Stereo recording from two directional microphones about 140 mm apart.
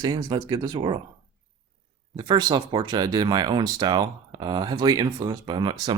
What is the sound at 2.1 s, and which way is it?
Speech, 30° right (ahead or behind).